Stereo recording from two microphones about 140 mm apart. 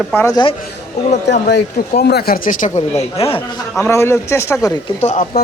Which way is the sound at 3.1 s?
45° left (ahead or behind).